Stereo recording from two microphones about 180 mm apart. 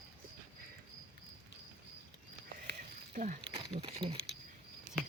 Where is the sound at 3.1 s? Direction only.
45° right (ahead or behind).